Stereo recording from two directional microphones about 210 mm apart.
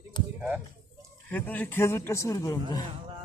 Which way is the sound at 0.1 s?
20° left (ahead or behind).